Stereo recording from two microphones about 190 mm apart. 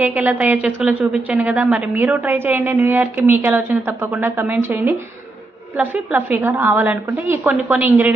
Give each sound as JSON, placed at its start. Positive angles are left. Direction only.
{"t": 0.0, "sound": "a woman's voice", "side_deg": -10}